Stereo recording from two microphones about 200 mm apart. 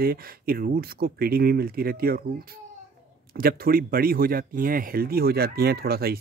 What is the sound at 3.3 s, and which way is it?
Speech, 45° right (ahead or behind).